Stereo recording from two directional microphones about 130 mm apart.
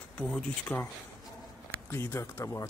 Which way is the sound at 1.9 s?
20° left (ahead or behind).